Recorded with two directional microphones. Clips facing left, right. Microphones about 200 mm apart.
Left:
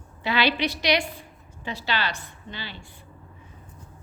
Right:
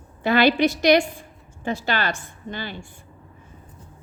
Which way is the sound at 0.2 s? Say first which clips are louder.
Right 7 dB; 50° right (ahead or behind).